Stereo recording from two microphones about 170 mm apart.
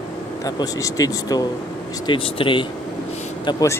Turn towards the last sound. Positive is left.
turn(degrees=20)  # may be behind; listen again after turning